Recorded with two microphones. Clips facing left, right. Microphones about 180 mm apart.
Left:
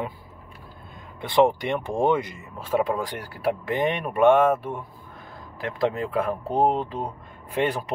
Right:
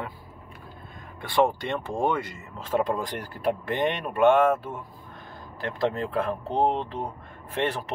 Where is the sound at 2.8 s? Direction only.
5° left (ahead or behind).